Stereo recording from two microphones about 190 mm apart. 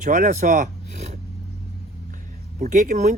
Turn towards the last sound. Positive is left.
turn(degrees=-40)  # may be behind; listen again after turning